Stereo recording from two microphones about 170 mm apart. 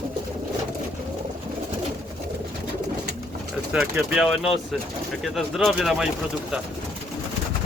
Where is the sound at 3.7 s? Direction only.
5° right (ahead or behind).